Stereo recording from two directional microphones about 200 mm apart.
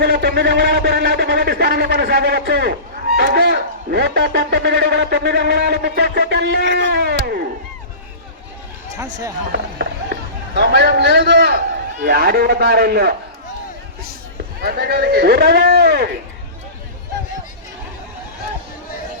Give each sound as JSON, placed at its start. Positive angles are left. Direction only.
{"t": 0.0, "sound": "a man's voice", "side_deg": -55}
{"t": 9.5, "sound": "a man's voice", "side_deg": -55}
{"t": 14.6, "sound": "speech", "side_deg": -50}